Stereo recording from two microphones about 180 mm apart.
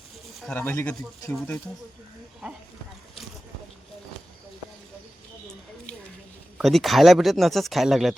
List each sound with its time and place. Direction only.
0.4 s speech: 10° left (ahead or behind)
2.4 s a sound: 5° right (ahead or behind)
6.6 s speech: centre (ahead or behind)